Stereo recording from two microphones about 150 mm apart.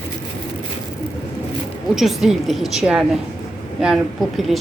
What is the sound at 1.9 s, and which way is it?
A woman's voice, centre (ahead or behind).